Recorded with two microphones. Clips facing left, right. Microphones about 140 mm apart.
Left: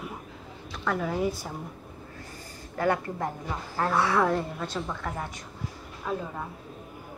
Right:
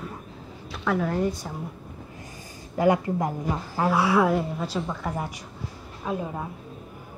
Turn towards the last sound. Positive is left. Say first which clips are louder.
# right 3 dB
turn(degrees=-15)  # may be behind; listen again after turning